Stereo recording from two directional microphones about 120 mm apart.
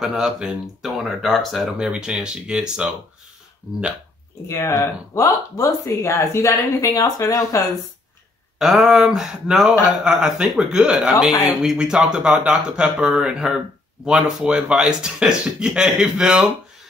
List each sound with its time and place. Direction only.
0.0 s speech: 5° right (ahead or behind)
4.5 s speech: 25° left (ahead or behind)
8.5 s speech: centre (ahead or behind)